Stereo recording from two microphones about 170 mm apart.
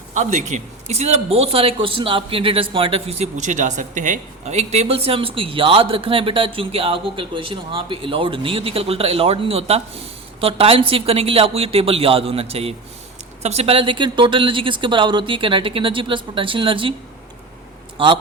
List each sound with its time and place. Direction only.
0.1 s a man's voice: 45° right (ahead or behind); by 16.9 s 30° right (ahead or behind)
17.9 s speech: 30° right (ahead or behind)